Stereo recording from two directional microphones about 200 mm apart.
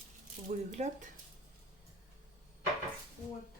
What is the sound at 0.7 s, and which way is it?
Speech, 35° right (ahead or behind).